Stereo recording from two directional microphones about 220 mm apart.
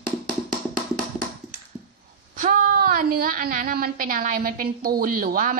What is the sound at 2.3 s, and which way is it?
A woman's voice, 40° right (ahead or behind).